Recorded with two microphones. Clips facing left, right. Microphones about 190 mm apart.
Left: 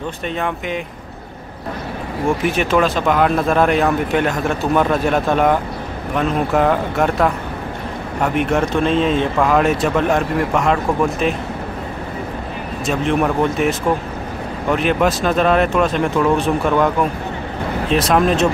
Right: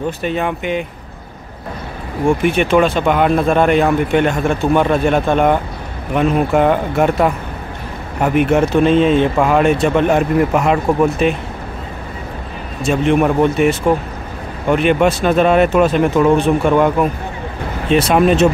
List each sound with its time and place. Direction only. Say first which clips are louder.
0.2 s speech: right 4 dB; 5° right (ahead or behind)
2.4 s speech: right 3 dB; centre (ahead or behind)
12.8 s speech: right 4 dB; centre (ahead or behind)
17.8 s speech: right 4 dB; centre (ahead or behind)